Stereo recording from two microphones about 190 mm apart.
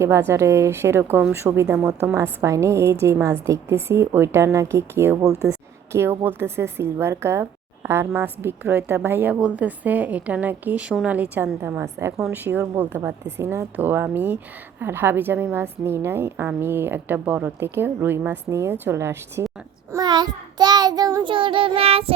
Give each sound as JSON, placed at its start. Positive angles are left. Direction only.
{"t": 0.0, "sound": "a woman's voice", "side_deg": -15}
{"t": 19.9, "sound": "child singing", "side_deg": -20}